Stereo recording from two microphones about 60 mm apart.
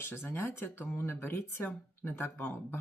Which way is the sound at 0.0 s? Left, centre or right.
Left.